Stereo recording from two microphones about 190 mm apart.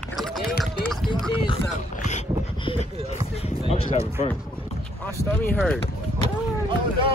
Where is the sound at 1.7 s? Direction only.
40° left (ahead or behind).